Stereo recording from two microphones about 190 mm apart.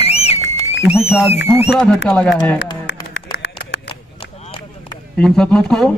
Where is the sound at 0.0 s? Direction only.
35° left (ahead or behind).